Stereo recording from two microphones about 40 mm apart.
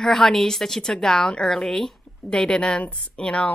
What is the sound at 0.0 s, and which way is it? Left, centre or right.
Speech, centre.